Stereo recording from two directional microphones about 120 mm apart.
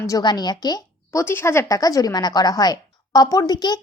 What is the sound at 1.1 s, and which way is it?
A woman's voice, 20° left (ahead or behind).